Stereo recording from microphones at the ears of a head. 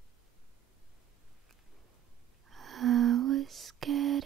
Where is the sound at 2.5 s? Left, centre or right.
Right.